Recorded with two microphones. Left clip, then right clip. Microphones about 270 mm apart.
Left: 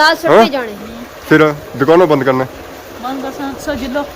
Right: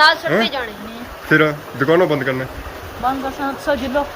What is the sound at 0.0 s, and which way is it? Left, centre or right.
Speech, left.